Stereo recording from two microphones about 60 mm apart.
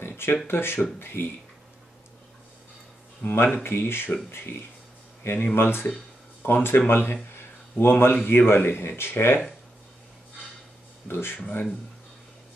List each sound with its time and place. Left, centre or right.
0.0 s a sound: left
0.5 s speech: left
3.2 s speech: left
7.3 s a sound: left
8.3 s speech: left
11.1 s speech: left